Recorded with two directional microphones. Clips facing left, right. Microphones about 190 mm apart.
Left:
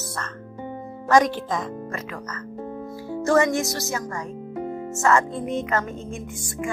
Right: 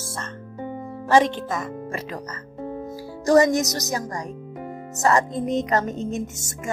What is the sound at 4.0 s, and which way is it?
Speech, 35° right (ahead or behind).